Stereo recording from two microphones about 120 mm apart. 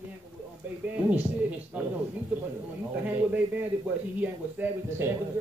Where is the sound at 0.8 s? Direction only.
10° right (ahead or behind).